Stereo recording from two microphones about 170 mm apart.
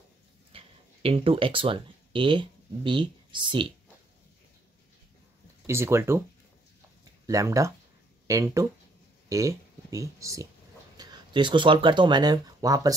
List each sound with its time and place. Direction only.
0.5 s speech: 35° right (ahead or behind)
5.7 s speech: 15° right (ahead or behind)
7.2 s speech: 20° right (ahead or behind)